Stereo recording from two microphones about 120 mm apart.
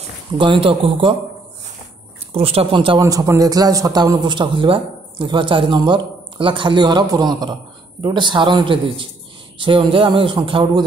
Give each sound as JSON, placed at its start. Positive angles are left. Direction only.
{"t": 0.3, "sound": "speech", "side_deg": -45}
{"t": 2.3, "sound": "speech", "side_deg": -55}
{"t": 3.0, "sound": "a man's voice", "side_deg": -30}